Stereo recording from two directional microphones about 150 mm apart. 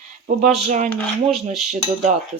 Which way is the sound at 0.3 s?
50° right (ahead or behind).